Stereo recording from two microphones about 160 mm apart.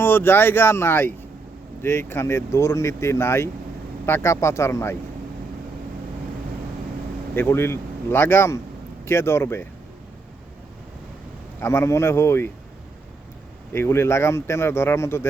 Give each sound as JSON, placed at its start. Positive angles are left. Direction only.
{"t": 0.0, "sound": "speech", "side_deg": 15}
{"t": 7.3, "sound": "speech", "side_deg": 15}
{"t": 11.6, "sound": "speech", "side_deg": 15}
{"t": 13.7, "sound": "speech", "side_deg": 15}